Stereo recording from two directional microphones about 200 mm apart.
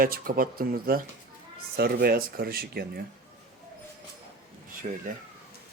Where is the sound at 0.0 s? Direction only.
45° right (ahead or behind).